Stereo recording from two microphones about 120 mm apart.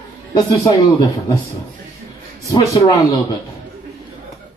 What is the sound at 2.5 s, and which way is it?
Speech, 25° left (ahead or behind).